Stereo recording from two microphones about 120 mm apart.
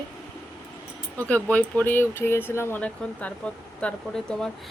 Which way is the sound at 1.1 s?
10° left (ahead or behind).